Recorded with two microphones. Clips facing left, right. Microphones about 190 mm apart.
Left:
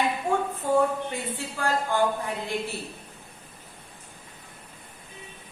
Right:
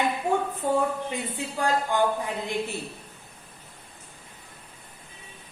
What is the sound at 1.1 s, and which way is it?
A woman's voice, 15° right (ahead or behind).